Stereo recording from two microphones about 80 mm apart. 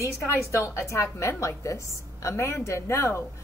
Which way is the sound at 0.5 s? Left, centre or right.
Left.